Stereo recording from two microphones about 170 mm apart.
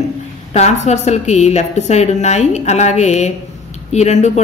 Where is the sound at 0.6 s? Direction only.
40° left (ahead or behind).